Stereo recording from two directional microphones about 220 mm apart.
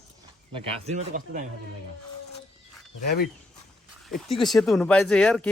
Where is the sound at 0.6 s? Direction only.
30° right (ahead or behind).